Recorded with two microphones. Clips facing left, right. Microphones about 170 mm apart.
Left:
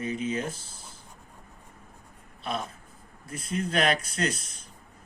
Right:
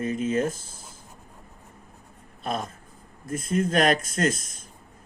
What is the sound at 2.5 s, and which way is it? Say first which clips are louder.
Speech: right 3 dB; 45° right (ahead or behind).